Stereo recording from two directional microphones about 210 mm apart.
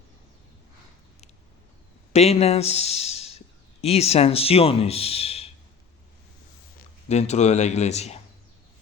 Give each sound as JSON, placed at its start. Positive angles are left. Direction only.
{"t": 2.1, "sound": "speech", "side_deg": 30}
{"t": 6.7, "sound": "speech", "side_deg": 30}